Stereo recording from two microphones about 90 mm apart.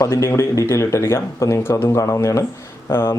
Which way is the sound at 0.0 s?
30° left (ahead or behind).